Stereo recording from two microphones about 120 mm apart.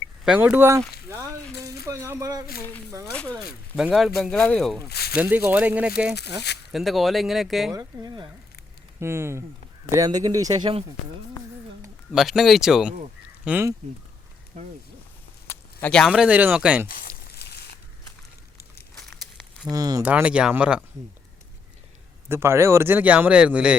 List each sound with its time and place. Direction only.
0.3 s speech: 15° right (ahead or behind)
3.1 s speech: 10° left (ahead or behind)
3.8 s speech: 5° right (ahead or behind)
5.1 s a man's voice: 15° right (ahead or behind)
7.7 s speech: 30° right (ahead or behind)
9.0 s speech: 20° right (ahead or behind)
12.1 s speech: 5° right (ahead or behind)
15.5 s a sound: 20° left (ahead or behind)
15.9 s speech: 5° left (ahead or behind)
16.1 s a man's voice: 10° right (ahead or behind)
19.7 s speech: 30° right (ahead or behind)
20.0 s a man's voice: 15° right (ahead or behind)
22.3 s a man's voice: 20° right (ahead or behind)